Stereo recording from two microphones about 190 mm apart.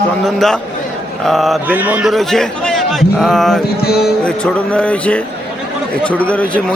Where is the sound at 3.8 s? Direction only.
55° left (ahead or behind).